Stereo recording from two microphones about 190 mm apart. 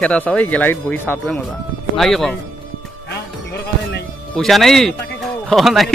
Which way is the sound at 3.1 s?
60° left (ahead or behind).